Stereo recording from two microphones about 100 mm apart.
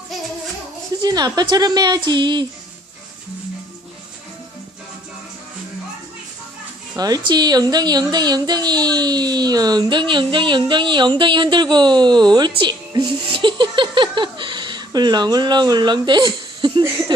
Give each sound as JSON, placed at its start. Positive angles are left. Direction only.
{"t": 1.0, "sound": "speech", "side_deg": -45}
{"t": 6.9, "sound": "speech", "side_deg": -40}